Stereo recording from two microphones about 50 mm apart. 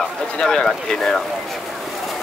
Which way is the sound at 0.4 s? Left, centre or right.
Centre.